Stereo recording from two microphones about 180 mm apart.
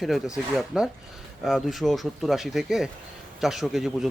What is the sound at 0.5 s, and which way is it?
Speech, centre (ahead or behind).